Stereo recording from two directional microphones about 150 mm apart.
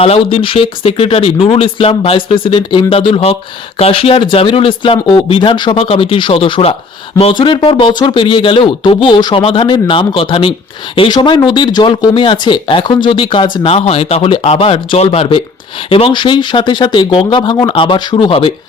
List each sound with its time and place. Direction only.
0.0 s speech: 40° left (ahead or behind)